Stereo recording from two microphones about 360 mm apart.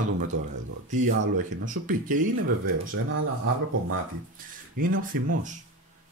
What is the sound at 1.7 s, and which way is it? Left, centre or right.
Speech, right.